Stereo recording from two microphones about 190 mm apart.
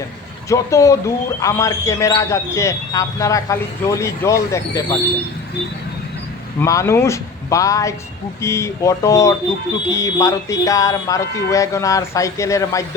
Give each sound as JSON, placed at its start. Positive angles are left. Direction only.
{"t": 0.4, "sound": "speech", "side_deg": 15}
{"t": 6.6, "sound": "speech", "side_deg": 15}